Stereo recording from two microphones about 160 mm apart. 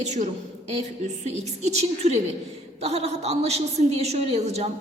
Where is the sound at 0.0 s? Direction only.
45° right (ahead or behind).